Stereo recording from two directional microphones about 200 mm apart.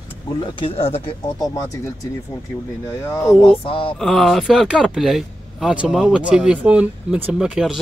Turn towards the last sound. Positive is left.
turn(degrees=-5)  # may be behind; listen again after turning